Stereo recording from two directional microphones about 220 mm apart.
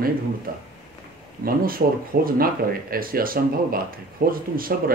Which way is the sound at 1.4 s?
40° right (ahead or behind).